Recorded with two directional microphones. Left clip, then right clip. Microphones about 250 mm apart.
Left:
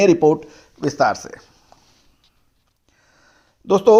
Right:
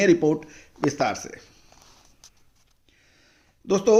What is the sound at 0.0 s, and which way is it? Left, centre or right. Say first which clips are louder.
Speech: left 6 dB; centre.